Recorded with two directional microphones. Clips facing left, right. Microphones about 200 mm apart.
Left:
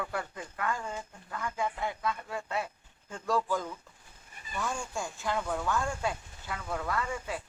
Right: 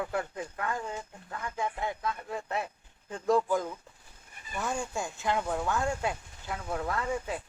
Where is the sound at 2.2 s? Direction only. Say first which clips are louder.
Right 1 dB; 20° right (ahead or behind).